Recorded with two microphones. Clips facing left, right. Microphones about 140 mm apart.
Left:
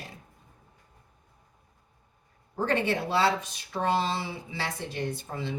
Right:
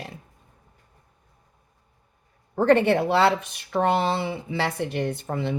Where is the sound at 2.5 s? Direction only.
60° right (ahead or behind).